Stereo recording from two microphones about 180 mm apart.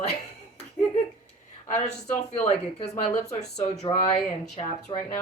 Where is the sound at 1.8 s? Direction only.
40° left (ahead or behind).